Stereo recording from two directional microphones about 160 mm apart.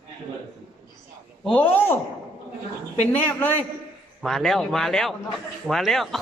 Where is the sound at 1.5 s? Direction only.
10° left (ahead or behind).